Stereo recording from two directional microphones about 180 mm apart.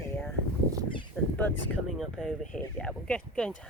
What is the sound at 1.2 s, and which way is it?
Speech, 5° left (ahead or behind).